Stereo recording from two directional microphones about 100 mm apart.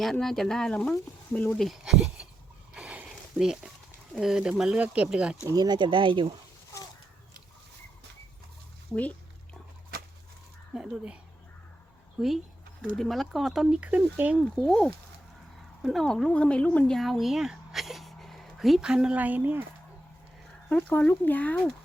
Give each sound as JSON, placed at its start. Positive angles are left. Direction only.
{"t": 0.0, "sound": "speech", "side_deg": 5}
{"t": 2.7, "sound": "a sound", "side_deg": -15}
{"t": 4.2, "sound": "speech", "side_deg": -5}
{"t": 5.5, "sound": "speech", "side_deg": -40}
{"t": 10.8, "sound": "speech", "side_deg": -10}
{"t": 14.4, "sound": "speech", "side_deg": 5}
{"t": 20.7, "sound": "speech", "side_deg": 15}